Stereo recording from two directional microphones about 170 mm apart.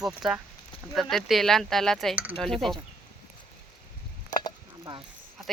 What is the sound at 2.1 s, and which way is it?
Speech, 10° right (ahead or behind).